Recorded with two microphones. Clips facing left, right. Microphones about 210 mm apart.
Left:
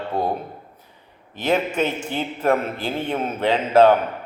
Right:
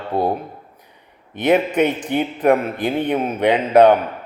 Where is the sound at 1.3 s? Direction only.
15° right (ahead or behind).